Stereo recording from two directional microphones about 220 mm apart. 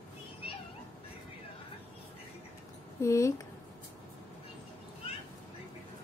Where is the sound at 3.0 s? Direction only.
15° left (ahead or behind).